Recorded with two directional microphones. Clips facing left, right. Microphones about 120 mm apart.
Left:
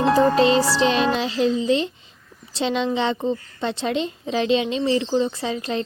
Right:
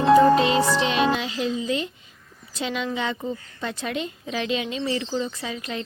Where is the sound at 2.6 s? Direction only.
30° left (ahead or behind).